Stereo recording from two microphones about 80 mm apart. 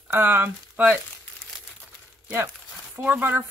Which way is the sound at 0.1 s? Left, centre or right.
Right.